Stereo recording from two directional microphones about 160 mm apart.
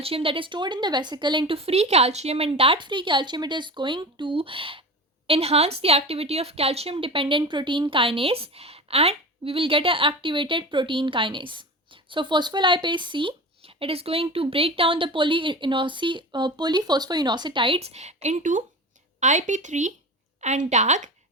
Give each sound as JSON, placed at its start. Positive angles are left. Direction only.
{"t": 0.0, "sound": "speech", "side_deg": -35}